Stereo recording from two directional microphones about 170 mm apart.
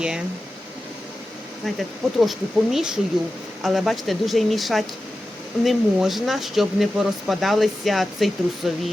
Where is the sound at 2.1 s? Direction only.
Centre (ahead or behind).